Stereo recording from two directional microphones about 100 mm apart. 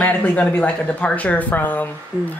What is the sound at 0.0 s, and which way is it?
Speech, 15° left (ahead or behind).